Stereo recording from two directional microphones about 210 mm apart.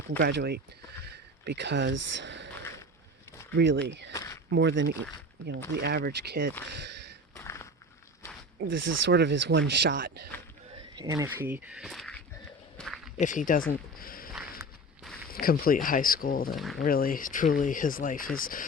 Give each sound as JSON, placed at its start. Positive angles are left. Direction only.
{"t": 0.2, "sound": "speech", "side_deg": -50}
{"t": 3.5, "sound": "speech", "side_deg": -55}
{"t": 4.1, "sound": "a sound", "side_deg": 15}
{"t": 4.5, "sound": "speech", "side_deg": -60}
{"t": 7.3, "sound": "walk", "side_deg": 15}
{"t": 8.6, "sound": "speech", "side_deg": -65}
{"t": 10.9, "sound": "speech", "side_deg": -15}
{"t": 12.7, "sound": "walk", "side_deg": 5}
{"t": 13.1, "sound": "speech", "side_deg": 40}
{"t": 14.0, "sound": "a sound", "side_deg": 45}
{"t": 15.3, "sound": "speech", "side_deg": 45}
{"t": 16.6, "sound": "speech", "side_deg": 0}
{"t": 16.8, "sound": "speech", "side_deg": 45}